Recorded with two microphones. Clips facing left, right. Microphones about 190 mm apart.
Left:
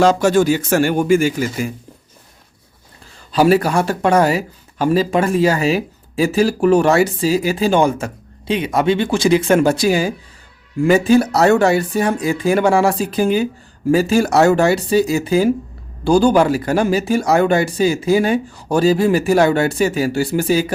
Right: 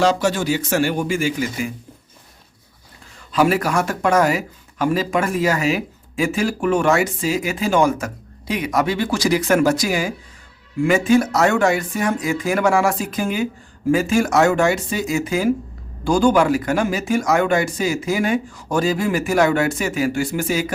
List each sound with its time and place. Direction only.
0.0 s speech: 50° left (ahead or behind)
3.2 s speech: 30° left (ahead or behind)